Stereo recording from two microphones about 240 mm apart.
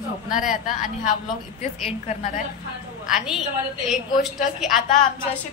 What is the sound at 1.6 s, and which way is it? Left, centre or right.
Speech, left.